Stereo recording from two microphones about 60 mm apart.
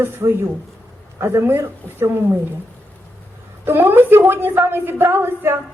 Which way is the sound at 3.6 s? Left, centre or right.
Right.